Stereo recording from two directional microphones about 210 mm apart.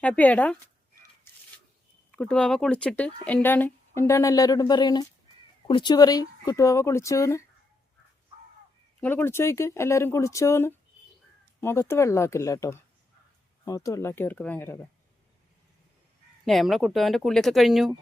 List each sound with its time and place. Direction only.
0.0 s speech: 5° left (ahead or behind)
2.1 s speech: 5° left (ahead or behind)
9.0 s speech: 10° left (ahead or behind)
16.5 s speech: centre (ahead or behind)